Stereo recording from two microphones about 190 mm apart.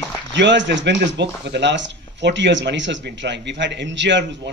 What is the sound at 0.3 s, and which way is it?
A man's voice, 70° right (ahead or behind).